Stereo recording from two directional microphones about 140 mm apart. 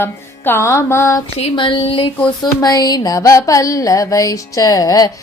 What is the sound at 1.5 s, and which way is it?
Speech, 35° left (ahead or behind).